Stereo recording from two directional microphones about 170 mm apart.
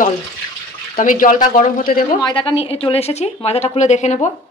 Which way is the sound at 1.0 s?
55° left (ahead or behind).